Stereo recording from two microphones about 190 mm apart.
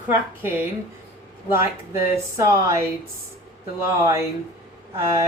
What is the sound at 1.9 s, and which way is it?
Speech, 15° right (ahead or behind).